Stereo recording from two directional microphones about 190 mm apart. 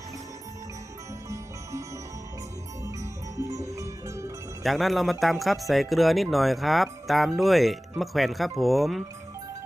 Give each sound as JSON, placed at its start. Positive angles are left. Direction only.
{"t": 2.8, "sound": "music", "side_deg": -15}
{"t": 4.6, "sound": "speech", "side_deg": 0}